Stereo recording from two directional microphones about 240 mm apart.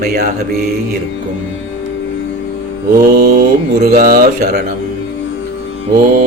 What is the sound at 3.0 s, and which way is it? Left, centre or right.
Mantra, right.